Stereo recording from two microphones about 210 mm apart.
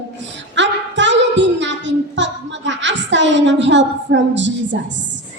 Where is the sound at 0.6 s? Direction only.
60° right (ahead or behind).